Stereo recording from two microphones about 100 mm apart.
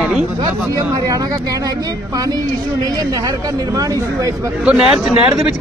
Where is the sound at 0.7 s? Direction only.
35° right (ahead or behind).